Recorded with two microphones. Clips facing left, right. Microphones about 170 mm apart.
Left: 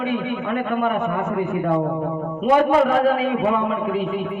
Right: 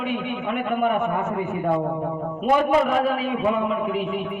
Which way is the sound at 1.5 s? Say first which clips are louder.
Left 1 dB; 50° left (ahead or behind).